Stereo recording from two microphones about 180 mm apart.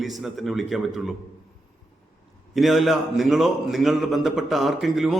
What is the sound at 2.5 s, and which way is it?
A man's voice, centre (ahead or behind).